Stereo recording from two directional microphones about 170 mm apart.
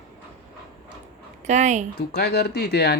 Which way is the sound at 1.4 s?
45° right (ahead or behind).